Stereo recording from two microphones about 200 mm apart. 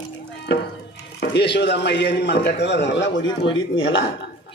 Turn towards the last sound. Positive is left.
turn(degrees=75)  # may be behind; listen again after turning